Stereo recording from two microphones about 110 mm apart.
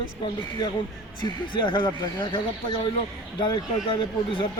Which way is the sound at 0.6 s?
40° left (ahead or behind).